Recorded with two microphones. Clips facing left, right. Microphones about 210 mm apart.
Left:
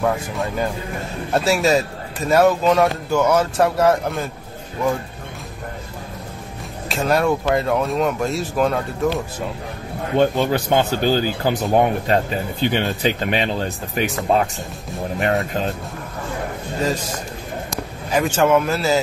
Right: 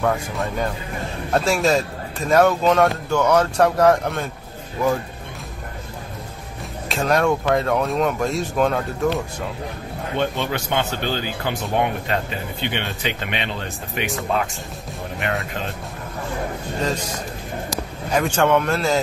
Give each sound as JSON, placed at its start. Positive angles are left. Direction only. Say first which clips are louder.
{"t": 0.0, "sound": "speech", "louder": "left 1 dB", "side_deg": 0}
{"t": 6.9, "sound": "speech", "louder": "left 1 dB", "side_deg": 0}
{"t": 10.1, "sound": "a man's voice", "louder": "left 6 dB", "side_deg": 40}
{"t": 17.6, "sound": "a man's voice", "louder": "even", "side_deg": 5}